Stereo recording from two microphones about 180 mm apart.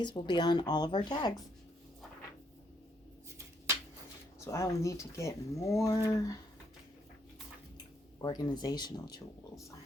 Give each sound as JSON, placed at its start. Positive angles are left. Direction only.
{"t": 0.0, "sound": "speech", "side_deg": 25}
{"t": 4.4, "sound": "speech", "side_deg": 15}
{"t": 8.2, "sound": "speech", "side_deg": 25}